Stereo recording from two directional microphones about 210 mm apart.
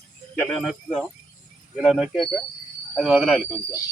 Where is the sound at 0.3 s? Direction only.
5° left (ahead or behind).